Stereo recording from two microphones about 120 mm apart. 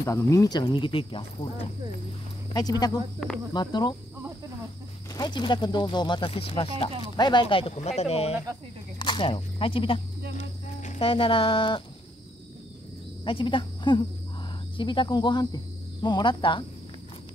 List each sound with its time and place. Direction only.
0.0 s speech: 25° left (ahead or behind); by 1.7 s 45° left (ahead or behind)
2.5 s speech: 35° left (ahead or behind)
3.2 s speech: centre (ahead or behind)
3.5 s speech: 35° left (ahead or behind)
5.1 s speech: 35° left (ahead or behind); by 6.7 s 50° left (ahead or behind)
7.2 s speech: 40° left (ahead or behind)
8.0 s speech: 60° left (ahead or behind)
8.9 s speech: 40° left (ahead or behind)
10.3 s cricket: 90° left
11.0 s speech: 50° left (ahead or behind)
13.2 s speech: 45° left (ahead or behind)